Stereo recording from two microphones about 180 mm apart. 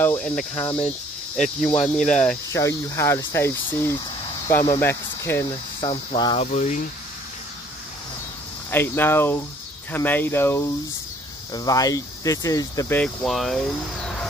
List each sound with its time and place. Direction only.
0.0 s speech: 5° left (ahead or behind)
2.5 s speech: 15° left (ahead or behind)
5.8 s speech: 25° left (ahead or behind)
6.4 s speech: 40° left (ahead or behind)
8.6 s speech: 10° left (ahead or behind)